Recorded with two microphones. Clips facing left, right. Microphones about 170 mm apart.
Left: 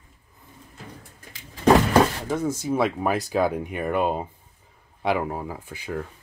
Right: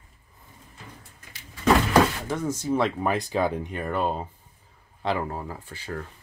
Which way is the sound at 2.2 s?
10° left (ahead or behind).